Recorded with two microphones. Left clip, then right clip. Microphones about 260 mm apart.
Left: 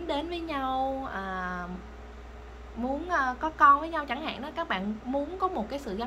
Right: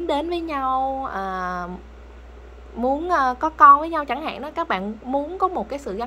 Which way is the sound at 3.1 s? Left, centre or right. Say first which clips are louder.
Right 5 dB; right.